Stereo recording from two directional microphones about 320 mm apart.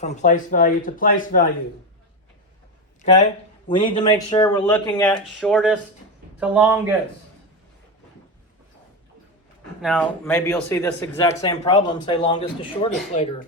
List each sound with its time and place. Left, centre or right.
0.0 s speech: left
3.8 s a man's voice: centre
9.8 s a man's voice: centre